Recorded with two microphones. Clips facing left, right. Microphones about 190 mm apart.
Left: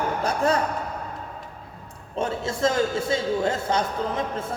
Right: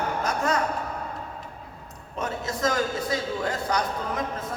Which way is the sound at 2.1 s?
30° left (ahead or behind).